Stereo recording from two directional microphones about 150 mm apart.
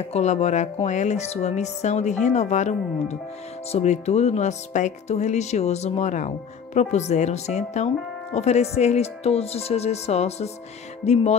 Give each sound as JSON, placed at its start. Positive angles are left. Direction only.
{"t": 0.1, "sound": "speech", "side_deg": 50}